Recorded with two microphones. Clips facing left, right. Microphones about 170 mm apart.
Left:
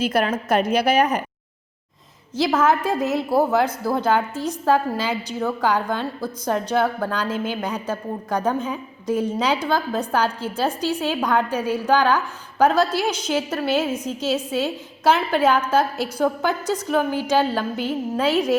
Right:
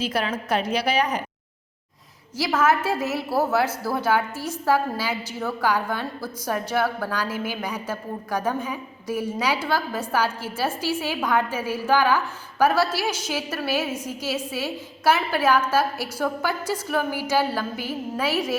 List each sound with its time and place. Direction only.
0.0 s a woman's voice: 50° left (ahead or behind)
2.3 s a woman's voice: 20° left (ahead or behind)